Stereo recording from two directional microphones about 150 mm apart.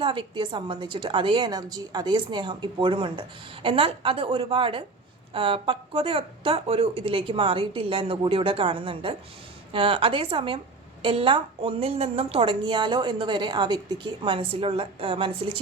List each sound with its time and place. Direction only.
0.0 s a woman's voice: 35° right (ahead or behind)